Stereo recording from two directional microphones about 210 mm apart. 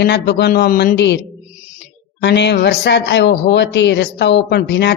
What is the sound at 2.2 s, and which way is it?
Speech, 55° left (ahead or behind).